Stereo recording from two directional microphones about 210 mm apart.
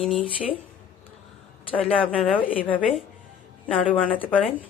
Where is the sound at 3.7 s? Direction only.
Centre (ahead or behind).